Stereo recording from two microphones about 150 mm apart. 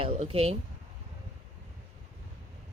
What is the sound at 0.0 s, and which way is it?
Speech, 40° right (ahead or behind).